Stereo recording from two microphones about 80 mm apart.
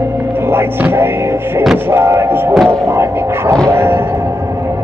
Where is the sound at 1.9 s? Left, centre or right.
Right.